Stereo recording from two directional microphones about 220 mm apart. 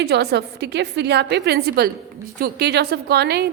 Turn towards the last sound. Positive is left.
turn(degrees=-50)  # may be behind; listen again after turning